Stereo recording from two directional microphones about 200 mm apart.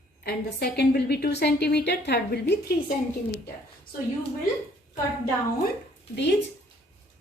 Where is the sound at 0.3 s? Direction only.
55° left (ahead or behind).